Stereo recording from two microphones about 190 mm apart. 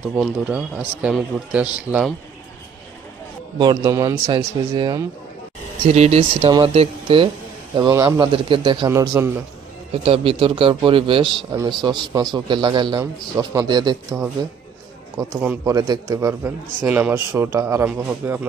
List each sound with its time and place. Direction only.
0.1 s a man's voice: 5° right (ahead or behind)
3.5 s a man's voice: 20° right (ahead or behind)
5.9 s a man's voice: 35° right (ahead or behind)
7.7 s a man's voice: 20° right (ahead or behind)
10.0 s a man's voice: 30° right (ahead or behind); by 18.4 s 10° right (ahead or behind)